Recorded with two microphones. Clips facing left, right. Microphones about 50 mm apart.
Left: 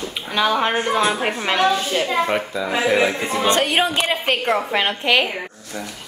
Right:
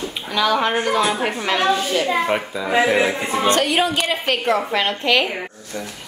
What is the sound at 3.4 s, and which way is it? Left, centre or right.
Speech, left.